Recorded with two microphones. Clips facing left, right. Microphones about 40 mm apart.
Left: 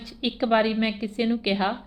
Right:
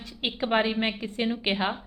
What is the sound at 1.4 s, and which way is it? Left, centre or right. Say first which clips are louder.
Speech: left 2 dB; right.